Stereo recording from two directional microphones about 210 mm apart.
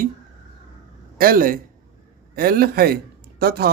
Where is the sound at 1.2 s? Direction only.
45° right (ahead or behind).